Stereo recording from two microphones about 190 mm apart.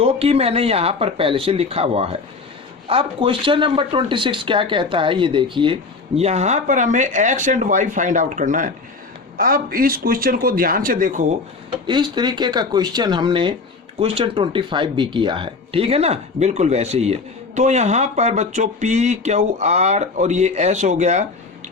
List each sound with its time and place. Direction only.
0.0 s a man's voice: 30° right (ahead or behind)
11.9 s speech: 25° right (ahead or behind)